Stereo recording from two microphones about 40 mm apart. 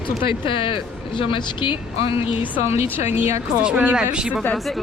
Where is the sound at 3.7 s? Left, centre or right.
Right.